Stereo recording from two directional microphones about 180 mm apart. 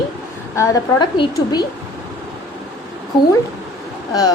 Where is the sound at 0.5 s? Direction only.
15° left (ahead or behind).